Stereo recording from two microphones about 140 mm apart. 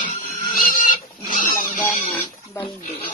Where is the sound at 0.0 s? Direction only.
70° left (ahead or behind).